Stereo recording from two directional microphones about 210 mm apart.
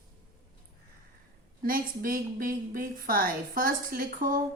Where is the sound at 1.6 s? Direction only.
45° right (ahead or behind).